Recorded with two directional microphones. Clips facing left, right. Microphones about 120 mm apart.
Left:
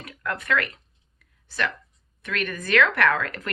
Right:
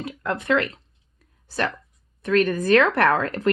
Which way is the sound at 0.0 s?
25° right (ahead or behind).